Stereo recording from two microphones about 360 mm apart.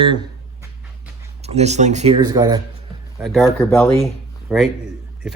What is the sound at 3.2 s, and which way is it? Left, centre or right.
Speech, centre.